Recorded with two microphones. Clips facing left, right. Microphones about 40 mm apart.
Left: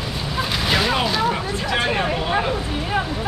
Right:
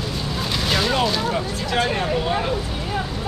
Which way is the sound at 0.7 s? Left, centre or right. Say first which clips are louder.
Even; centre.